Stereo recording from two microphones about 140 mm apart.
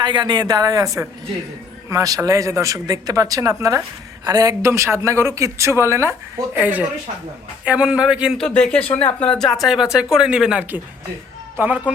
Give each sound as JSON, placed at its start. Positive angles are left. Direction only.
{"t": 0.0, "sound": "speech", "side_deg": -35}
{"t": 8.4, "sound": "a woman's voice", "side_deg": 5}